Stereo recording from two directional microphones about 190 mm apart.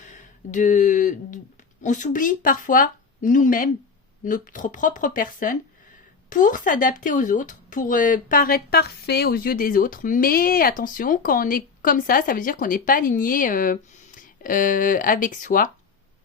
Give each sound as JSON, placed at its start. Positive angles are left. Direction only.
{"t": 0.0, "sound": "speech", "side_deg": 40}